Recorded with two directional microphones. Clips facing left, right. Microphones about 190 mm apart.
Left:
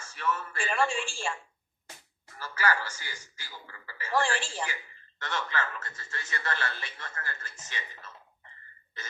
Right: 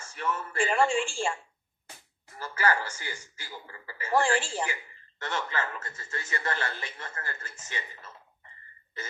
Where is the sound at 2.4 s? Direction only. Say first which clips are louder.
Right 2 dB; 20° right (ahead or behind).